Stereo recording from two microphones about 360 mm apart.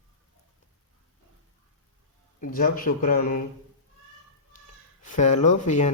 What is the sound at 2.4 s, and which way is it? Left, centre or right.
A man's voice, left.